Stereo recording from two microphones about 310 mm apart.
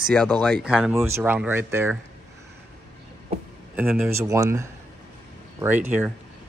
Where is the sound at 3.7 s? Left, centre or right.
Centre.